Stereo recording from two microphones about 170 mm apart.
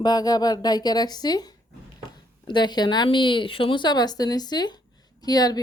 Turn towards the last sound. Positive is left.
turn(degrees=25)  # may be behind; listen again after turning